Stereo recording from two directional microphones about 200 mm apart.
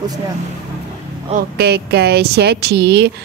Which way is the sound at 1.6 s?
55° right (ahead or behind).